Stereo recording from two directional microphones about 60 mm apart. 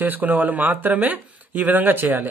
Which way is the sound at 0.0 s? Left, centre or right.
Right.